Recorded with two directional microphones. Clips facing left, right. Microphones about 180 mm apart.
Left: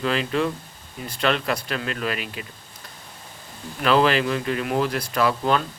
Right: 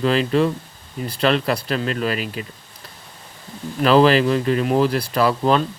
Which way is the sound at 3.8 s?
35° right (ahead or behind).